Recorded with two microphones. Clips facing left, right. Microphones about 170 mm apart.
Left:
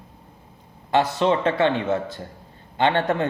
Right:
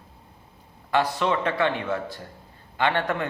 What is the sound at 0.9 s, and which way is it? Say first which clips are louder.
Speech: left 4 dB; 25° left (ahead or behind).